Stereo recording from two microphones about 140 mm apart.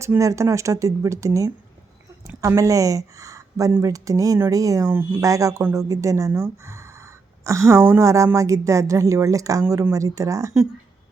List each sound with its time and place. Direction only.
0.0 s speech: 20° right (ahead or behind)